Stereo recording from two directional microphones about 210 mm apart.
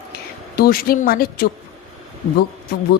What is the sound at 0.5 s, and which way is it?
Speech, 45° left (ahead or behind).